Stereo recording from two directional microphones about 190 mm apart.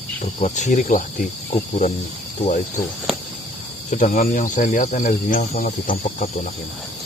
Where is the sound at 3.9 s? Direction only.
40° left (ahead or behind).